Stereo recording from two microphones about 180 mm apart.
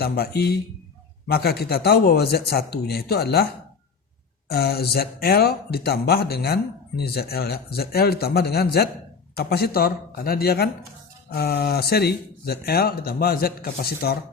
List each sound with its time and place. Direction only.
0.0 s speech: 60° left (ahead or behind)